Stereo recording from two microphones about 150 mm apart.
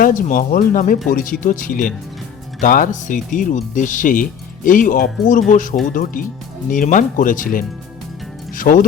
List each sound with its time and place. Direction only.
0.0 s speech: 65° left (ahead or behind)